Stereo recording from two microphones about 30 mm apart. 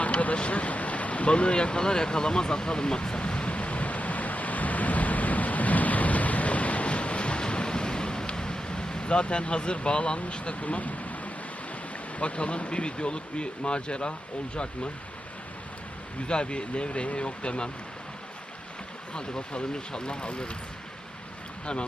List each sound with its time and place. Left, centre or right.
0.0 s a sound: left
0.3 s boat: left
10.3 s speech: left
12.2 s speech: left
16.2 s speech: left
19.1 s speech: left